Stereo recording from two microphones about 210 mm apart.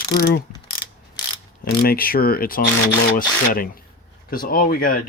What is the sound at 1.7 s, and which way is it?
Speech, 45° left (ahead or behind).